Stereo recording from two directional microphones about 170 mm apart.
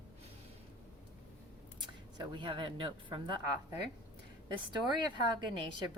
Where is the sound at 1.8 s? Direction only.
25° right (ahead or behind).